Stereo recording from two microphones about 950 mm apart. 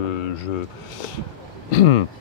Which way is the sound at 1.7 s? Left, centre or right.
Left.